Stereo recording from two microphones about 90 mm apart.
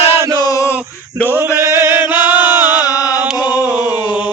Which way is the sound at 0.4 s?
35° left (ahead or behind).